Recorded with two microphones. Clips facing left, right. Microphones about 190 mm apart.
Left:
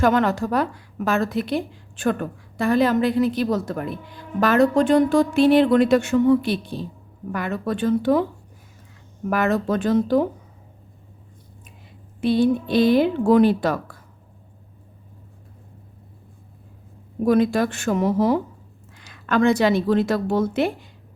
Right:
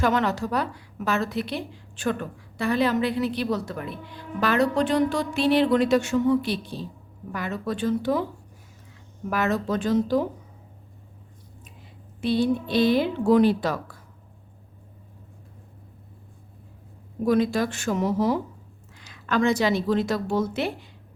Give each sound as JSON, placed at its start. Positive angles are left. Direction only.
{"t": 0.0, "sound": "a woman's voice", "side_deg": 50}
{"t": 9.3, "sound": "a woman's voice", "side_deg": 55}
{"t": 12.2, "sound": "a woman's voice", "side_deg": 50}
{"t": 17.2, "sound": "a woman's voice", "side_deg": 55}